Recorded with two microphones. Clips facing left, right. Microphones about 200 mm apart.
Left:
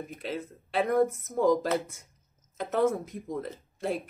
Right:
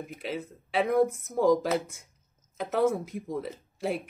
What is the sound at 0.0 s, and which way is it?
Speech, 5° right (ahead or behind).